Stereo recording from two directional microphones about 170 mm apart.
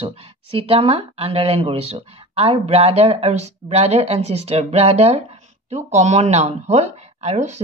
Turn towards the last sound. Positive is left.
turn(degrees=-40)  # may be behind; listen again after turning